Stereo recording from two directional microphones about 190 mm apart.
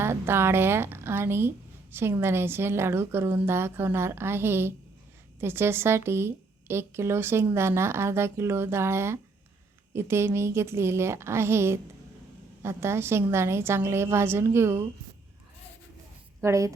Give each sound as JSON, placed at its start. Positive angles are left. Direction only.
{"t": 0.0, "sound": "speech", "side_deg": -10}
{"t": 16.4, "sound": "speech", "side_deg": -15}